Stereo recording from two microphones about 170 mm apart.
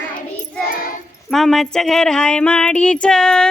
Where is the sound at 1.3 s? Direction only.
Centre (ahead or behind).